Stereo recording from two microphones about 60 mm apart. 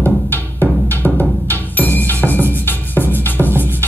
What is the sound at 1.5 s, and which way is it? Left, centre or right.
Music, left.